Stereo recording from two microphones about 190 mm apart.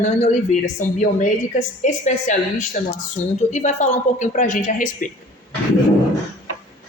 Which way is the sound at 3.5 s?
35° left (ahead or behind).